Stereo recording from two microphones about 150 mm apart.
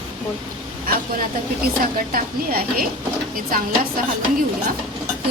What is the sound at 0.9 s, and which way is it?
A woman's voice, 80° right.